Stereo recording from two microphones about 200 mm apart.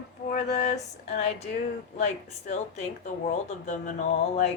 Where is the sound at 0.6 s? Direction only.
35° left (ahead or behind).